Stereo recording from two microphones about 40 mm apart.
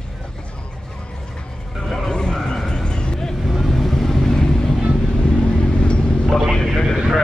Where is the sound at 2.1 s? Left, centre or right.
Left.